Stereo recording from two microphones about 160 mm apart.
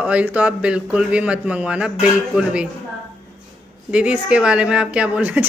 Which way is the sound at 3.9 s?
5° right (ahead or behind).